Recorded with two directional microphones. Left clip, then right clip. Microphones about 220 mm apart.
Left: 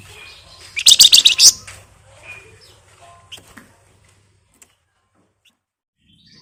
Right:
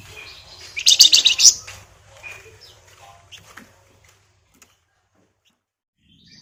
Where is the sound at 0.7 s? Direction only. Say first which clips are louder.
Left 4 dB; 20° left (ahead or behind).